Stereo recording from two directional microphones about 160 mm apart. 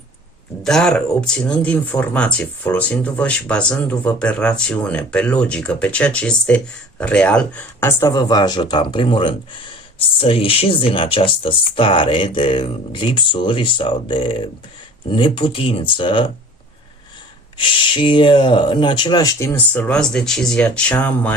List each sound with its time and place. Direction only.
0.6 s speech: 5° left (ahead or behind); by 16.2 s 30° left (ahead or behind)
17.6 s speech: 30° left (ahead or behind); by 21.3 s 10° left (ahead or behind)